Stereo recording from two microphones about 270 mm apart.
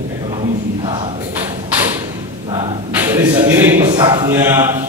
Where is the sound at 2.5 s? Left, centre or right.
Centre.